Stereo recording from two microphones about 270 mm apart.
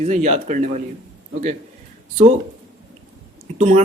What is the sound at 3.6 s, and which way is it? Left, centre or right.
Speech, right.